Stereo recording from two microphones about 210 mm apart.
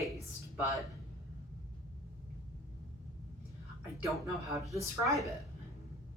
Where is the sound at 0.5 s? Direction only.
15° right (ahead or behind).